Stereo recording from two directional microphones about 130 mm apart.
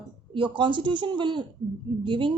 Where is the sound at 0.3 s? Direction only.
40° right (ahead or behind).